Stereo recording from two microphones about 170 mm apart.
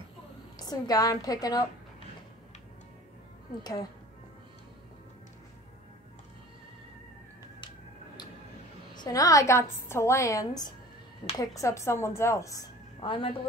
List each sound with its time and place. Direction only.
0.6 s a woman's voice: 20° left (ahead or behind)
9.0 s a woman's voice: 20° left (ahead or behind)